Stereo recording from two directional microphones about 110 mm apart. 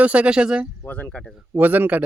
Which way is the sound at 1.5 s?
15° right (ahead or behind).